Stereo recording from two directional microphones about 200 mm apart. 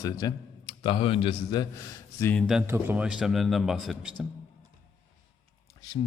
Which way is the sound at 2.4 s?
Centre (ahead or behind).